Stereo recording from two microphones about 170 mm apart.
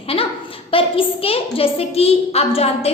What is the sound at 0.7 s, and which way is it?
A woman's voice, 35° left (ahead or behind).